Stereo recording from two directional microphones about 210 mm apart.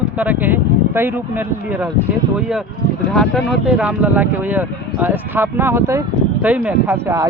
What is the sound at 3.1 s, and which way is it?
Speech, centre (ahead or behind).